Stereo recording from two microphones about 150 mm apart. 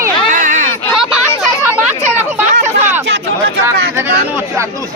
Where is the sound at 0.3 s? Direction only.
60° right (ahead or behind).